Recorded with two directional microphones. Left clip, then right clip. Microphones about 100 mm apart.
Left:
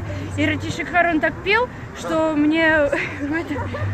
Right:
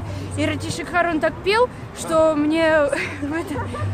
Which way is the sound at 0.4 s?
45° right (ahead or behind).